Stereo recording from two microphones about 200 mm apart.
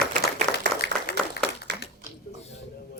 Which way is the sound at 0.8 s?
60° left (ahead or behind).